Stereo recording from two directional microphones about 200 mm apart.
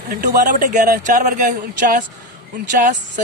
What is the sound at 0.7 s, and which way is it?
Speech, 50° right (ahead or behind).